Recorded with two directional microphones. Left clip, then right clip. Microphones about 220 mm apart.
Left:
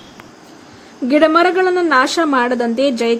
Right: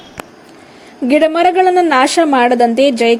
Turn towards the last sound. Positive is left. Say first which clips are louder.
# right 5 dB
turn(degrees=25)  # may be behind; listen again after turning